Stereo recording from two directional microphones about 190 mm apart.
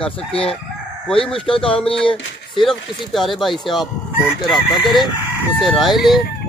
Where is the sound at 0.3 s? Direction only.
30° left (ahead or behind).